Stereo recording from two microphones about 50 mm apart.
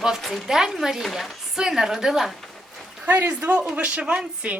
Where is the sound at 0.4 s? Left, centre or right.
Centre.